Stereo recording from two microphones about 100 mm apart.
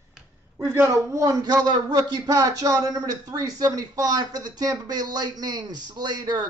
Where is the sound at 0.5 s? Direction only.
25° right (ahead or behind).